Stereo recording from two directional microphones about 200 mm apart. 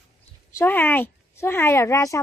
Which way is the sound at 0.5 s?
10° left (ahead or behind).